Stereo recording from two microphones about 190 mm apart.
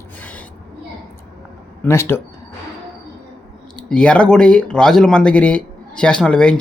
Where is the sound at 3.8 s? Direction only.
5° left (ahead or behind).